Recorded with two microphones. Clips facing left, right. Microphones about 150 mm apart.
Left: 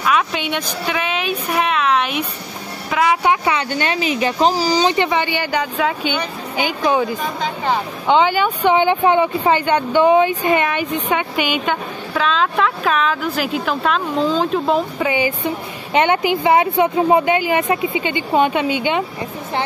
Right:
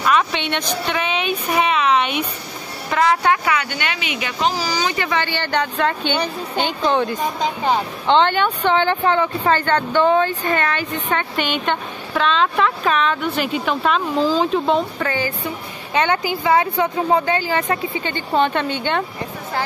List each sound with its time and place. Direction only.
0.0 s speech: 5° left (ahead or behind)
3.4 s speech: 30° left (ahead or behind); by 15.0 s centre (ahead or behind)
15.0 s speech: 15° left (ahead or behind)